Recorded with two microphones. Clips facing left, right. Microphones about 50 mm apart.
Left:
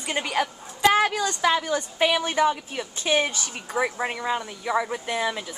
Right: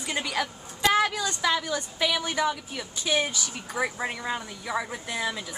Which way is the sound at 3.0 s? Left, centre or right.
Left.